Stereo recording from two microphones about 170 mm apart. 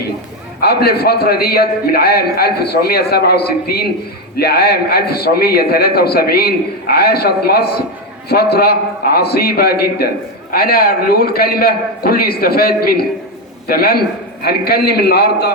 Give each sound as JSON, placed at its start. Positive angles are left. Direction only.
{"t": 0.6, "sound": "a man's voice", "side_deg": 65}